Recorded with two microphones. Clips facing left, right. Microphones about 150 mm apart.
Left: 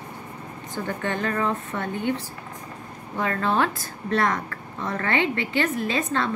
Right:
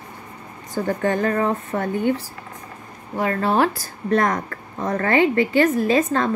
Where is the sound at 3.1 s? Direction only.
35° right (ahead or behind).